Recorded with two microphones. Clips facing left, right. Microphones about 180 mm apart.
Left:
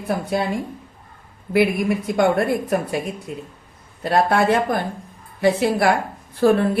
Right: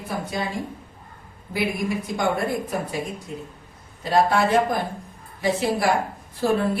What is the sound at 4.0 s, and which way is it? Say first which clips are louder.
Speech: left 2 dB; 60° left (ahead or behind).